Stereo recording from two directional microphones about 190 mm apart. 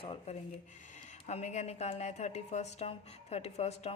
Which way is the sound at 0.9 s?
40° left (ahead or behind).